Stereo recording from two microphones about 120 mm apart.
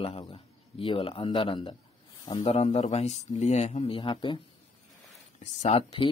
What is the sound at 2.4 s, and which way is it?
Speech, 65° left (ahead or behind).